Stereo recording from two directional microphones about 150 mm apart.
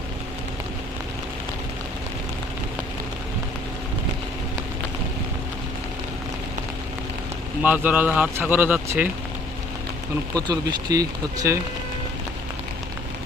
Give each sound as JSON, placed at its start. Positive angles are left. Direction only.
{"t": 7.6, "sound": "a man's voice", "side_deg": -10}
{"t": 10.3, "sound": "speech", "side_deg": -25}